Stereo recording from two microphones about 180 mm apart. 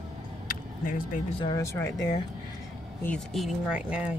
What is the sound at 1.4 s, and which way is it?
Speech, 20° left (ahead or behind).